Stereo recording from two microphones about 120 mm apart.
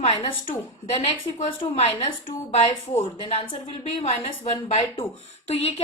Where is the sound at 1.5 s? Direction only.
60° left (ahead or behind).